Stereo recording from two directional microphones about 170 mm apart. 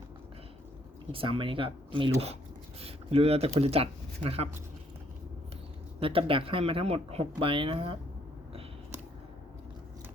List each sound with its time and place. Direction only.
1.1 s speech: 30° right (ahead or behind)
6.0 s speech: 30° right (ahead or behind)